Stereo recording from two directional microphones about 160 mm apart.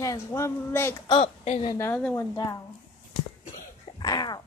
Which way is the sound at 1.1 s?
40° left (ahead or behind).